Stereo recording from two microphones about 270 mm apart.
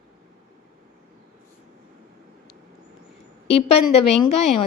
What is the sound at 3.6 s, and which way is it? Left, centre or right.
A woman's voice, left.